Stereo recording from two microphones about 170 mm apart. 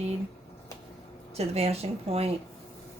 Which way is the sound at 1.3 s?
40° right (ahead or behind).